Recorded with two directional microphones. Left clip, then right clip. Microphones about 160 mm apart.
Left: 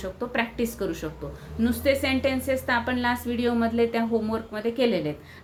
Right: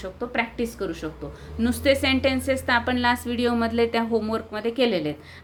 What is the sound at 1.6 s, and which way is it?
A woman's voice, 25° right (ahead or behind).